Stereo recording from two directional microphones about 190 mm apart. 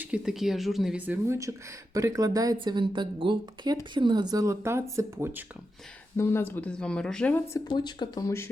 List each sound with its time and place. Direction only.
0.0 s speech: 5° right (ahead or behind)
6.1 s speech: 15° left (ahead or behind)
7.7 s speech: 25° left (ahead or behind)